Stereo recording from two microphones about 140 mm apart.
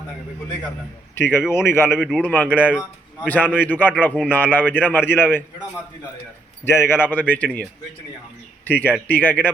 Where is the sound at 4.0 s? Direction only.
10° left (ahead or behind).